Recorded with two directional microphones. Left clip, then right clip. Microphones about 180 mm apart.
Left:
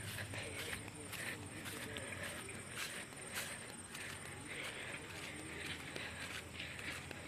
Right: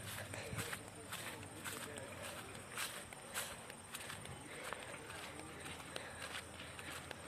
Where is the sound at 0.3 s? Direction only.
5° right (ahead or behind).